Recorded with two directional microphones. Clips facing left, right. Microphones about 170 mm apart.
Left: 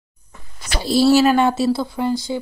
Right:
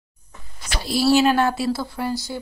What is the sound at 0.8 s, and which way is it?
Speech, 25° left (ahead or behind).